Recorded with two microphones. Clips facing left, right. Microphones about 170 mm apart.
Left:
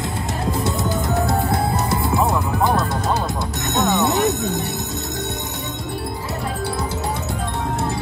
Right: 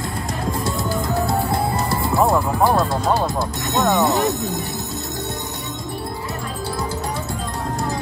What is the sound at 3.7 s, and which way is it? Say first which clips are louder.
Music: right 1 dB; 20° left (ahead or behind).